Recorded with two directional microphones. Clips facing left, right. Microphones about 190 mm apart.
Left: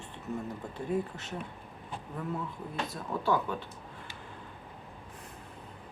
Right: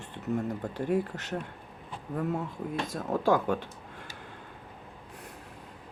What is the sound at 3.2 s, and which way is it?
Speech, 90° right.